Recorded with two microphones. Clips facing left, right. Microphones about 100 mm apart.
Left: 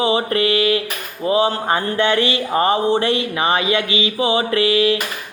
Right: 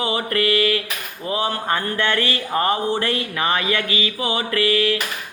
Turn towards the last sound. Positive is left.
turn(degrees=20)  # may be behind; listen again after turning